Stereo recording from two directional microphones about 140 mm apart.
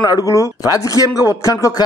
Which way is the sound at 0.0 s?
25° left (ahead or behind).